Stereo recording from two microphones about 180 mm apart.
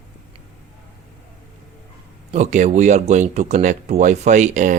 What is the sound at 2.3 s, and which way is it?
Speech, 40° right (ahead or behind).